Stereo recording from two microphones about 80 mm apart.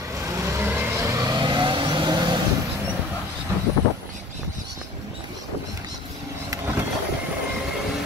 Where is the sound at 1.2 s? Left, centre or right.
Right.